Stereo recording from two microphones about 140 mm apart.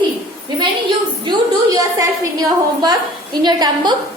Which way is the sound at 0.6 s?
35° right (ahead or behind).